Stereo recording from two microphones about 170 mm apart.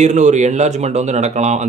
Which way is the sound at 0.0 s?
45° right (ahead or behind).